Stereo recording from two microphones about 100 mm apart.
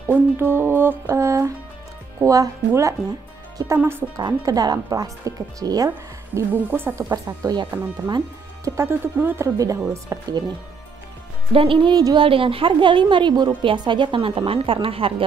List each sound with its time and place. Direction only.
0.1 s speech: 20° right (ahead or behind)
4.2 s speech: 40° right (ahead or behind)
5.9 s speech: 20° right (ahead or behind)
7.7 s speech: 15° right (ahead or behind)
8.6 s speech: 25° right (ahead or behind)
10.0 s speech: 45° right (ahead or behind)
11.5 s a woman's voice: 60° right (ahead or behind)